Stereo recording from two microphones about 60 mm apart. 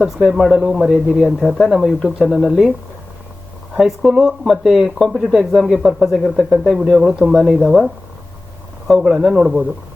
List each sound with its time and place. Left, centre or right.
0.0 s speech: centre
3.8 s speech: centre
7.0 s a man's voice: centre
7.3 s speech: centre
8.9 s a man's voice: centre